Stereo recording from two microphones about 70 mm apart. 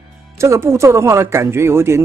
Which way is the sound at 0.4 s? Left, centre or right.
Right.